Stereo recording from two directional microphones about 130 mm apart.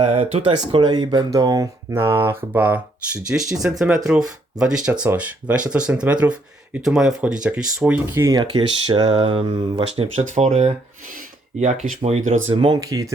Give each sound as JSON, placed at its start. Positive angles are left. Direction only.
{"t": 0.0, "sound": "speech", "side_deg": -50}
{"t": 0.5, "sound": "speech", "side_deg": -35}
{"t": 8.4, "sound": "speech", "side_deg": -35}
{"t": 10.2, "sound": "speech", "side_deg": -65}
{"t": 12.5, "sound": "speech", "side_deg": -35}